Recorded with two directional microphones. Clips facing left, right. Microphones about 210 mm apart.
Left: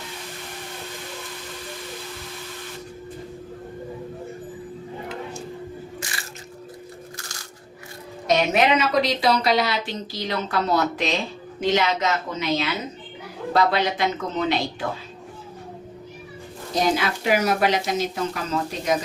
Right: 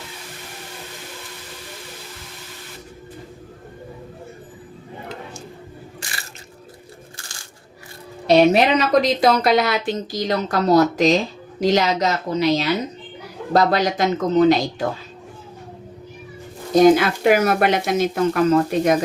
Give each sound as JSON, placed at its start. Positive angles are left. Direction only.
{"t": 8.3, "sound": "a woman's voice", "side_deg": -35}
{"t": 16.8, "sound": "speech", "side_deg": -55}